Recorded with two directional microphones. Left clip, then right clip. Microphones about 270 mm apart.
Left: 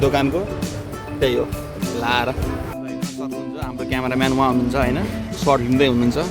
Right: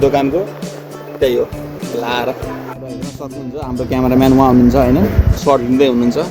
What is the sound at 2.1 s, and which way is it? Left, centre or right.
Speech, centre.